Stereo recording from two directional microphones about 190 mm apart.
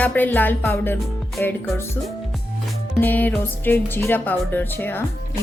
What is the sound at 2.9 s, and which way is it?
Speech, 10° left (ahead or behind).